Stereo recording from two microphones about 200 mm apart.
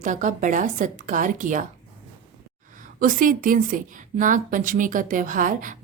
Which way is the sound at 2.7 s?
40° right (ahead or behind).